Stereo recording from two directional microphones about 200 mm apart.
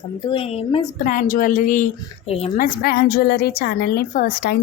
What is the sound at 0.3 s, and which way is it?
Speech, 30° left (ahead or behind).